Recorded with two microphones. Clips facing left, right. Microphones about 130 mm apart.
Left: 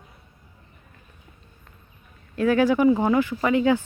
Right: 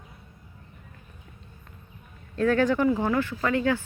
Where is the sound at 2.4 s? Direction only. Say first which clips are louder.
Left 3 dB; 10° left (ahead or behind).